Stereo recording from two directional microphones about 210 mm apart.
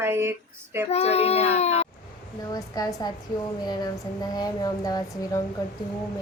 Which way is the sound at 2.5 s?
15° left (ahead or behind).